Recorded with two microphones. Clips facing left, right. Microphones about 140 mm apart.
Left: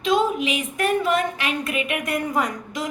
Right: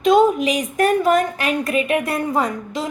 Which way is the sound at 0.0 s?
45° right (ahead or behind).